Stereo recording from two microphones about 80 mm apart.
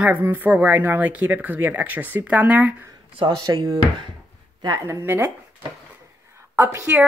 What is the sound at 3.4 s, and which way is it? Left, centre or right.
Speech, right.